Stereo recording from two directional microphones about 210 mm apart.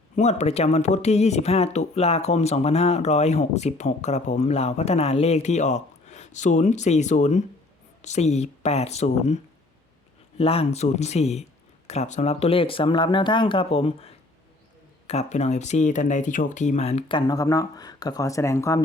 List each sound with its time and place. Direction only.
0.2 s speech: 30° left (ahead or behind); by 18.8 s 15° left (ahead or behind)